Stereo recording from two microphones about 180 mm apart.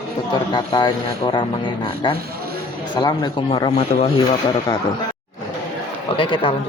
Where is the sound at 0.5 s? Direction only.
25° left (ahead or behind).